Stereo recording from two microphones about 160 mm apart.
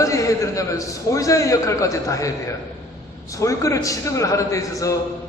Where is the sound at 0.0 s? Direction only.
20° left (ahead or behind).